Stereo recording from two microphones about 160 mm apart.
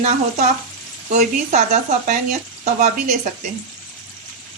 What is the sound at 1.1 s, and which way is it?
Speech, 50° right (ahead or behind).